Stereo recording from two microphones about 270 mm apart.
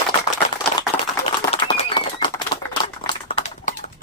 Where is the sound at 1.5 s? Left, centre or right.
Centre.